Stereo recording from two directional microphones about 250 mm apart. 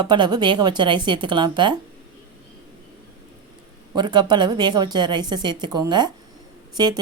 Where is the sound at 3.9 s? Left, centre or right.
Centre.